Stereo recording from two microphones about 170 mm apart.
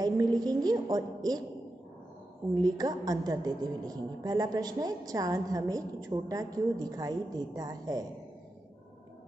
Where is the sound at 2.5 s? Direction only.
25° right (ahead or behind).